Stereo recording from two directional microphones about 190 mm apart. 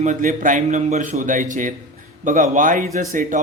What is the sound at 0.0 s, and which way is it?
A man's voice, 40° right (ahead or behind).